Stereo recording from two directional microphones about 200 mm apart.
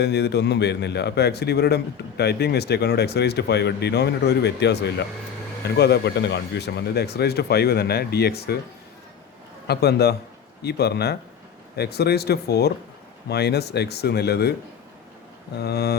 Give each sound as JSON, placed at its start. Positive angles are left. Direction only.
{"t": 0.0, "sound": "a man's voice", "side_deg": 55}
{"t": 9.6, "sound": "a man's voice", "side_deg": 55}
{"t": 15.5, "sound": "speech", "side_deg": 55}